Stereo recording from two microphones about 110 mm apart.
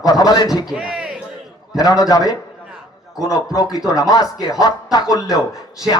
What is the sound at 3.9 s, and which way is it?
Speech, 35° left (ahead or behind).